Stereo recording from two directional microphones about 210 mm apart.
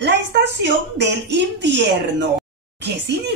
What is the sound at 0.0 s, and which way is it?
A woman's voice, 55° right (ahead or behind).